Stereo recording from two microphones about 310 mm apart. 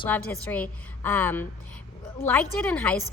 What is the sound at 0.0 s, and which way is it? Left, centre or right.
A woman's voice, centre.